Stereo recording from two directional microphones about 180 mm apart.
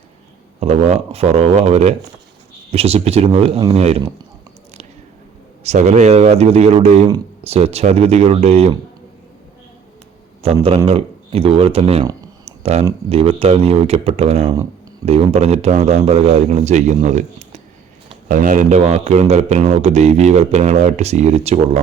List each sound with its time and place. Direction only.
0.6 s speech: 35° right (ahead or behind)
5.6 s speech: 40° right (ahead or behind)
10.4 s speech: 30° right (ahead or behind)
12.5 s a sound: 35° right (ahead or behind)
13.1 s speech: 30° right (ahead or behind)
14.4 s speech: 20° right (ahead or behind)
15.0 s speech: 35° right (ahead or behind)